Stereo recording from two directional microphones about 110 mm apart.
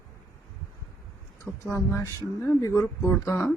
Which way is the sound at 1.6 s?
25° left (ahead or behind).